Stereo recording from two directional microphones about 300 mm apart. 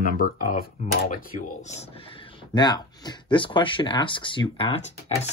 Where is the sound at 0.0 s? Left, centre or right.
Left.